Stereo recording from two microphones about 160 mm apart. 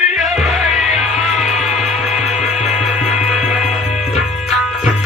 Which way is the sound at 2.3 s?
50° left (ahead or behind).